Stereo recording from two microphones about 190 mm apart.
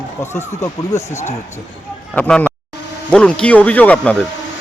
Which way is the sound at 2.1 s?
5° left (ahead or behind).